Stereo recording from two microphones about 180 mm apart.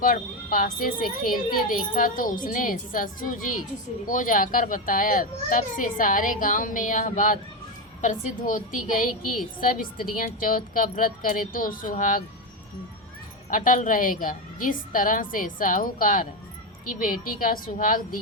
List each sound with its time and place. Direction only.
0.0 s a child's voice: 50° left (ahead or behind)
13.5 s a child's voice: 45° left (ahead or behind)